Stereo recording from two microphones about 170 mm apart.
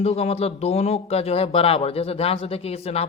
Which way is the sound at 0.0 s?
35° left (ahead or behind).